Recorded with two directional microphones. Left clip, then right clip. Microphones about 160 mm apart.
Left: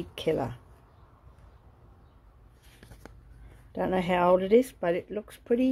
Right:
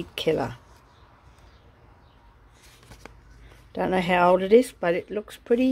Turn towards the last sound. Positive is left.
turn(degrees=-5)  # may be behind; listen again after turning